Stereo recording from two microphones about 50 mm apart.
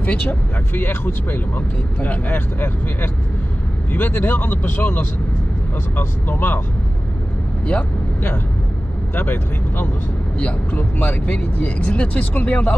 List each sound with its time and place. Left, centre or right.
0.0 s speech: left
0.7 s speech: left
9.1 s speech: left
10.4 s speech: left